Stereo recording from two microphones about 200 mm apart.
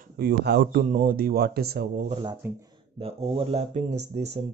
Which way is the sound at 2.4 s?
10° right (ahead or behind).